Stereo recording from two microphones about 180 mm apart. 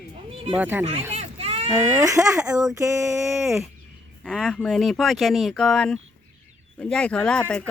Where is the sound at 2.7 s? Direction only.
15° right (ahead or behind).